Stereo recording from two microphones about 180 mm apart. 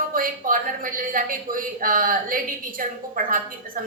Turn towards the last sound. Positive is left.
turn(degrees=-50)  # may be behind; listen again after turning